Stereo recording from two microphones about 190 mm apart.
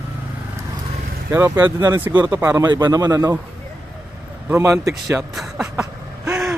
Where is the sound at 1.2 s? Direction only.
15° right (ahead or behind).